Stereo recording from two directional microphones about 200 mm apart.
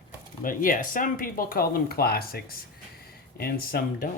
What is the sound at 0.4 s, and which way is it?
Speech, 45° left (ahead or behind).